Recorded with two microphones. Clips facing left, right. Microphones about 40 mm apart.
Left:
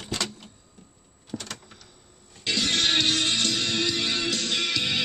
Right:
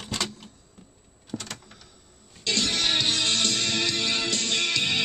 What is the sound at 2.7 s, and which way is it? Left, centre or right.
Music, left.